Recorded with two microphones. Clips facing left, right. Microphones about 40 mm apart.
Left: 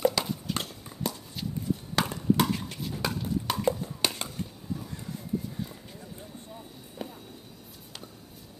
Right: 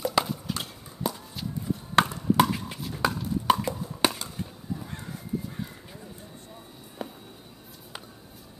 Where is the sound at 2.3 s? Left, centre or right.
Centre.